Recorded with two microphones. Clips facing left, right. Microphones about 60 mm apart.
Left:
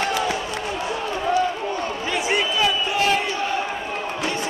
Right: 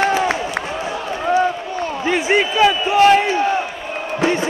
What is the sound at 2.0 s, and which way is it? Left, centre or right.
Basketball bounce, right.